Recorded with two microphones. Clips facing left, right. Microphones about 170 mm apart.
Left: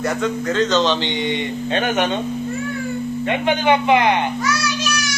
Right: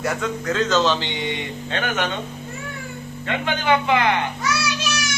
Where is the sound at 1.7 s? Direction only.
20° left (ahead or behind).